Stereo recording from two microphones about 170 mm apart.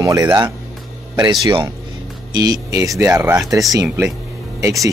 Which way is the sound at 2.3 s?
20° right (ahead or behind).